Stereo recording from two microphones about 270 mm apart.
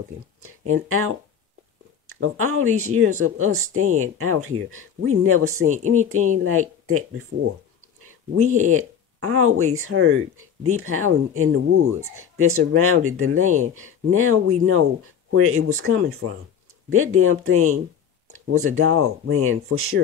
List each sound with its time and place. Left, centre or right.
0.4 s speech: right
2.1 s speech: right
8.5 s speech: right